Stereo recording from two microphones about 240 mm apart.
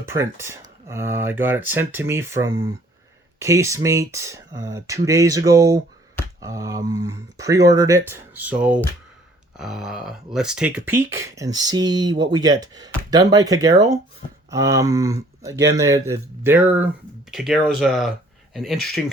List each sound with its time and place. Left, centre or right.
0.0 s speech: centre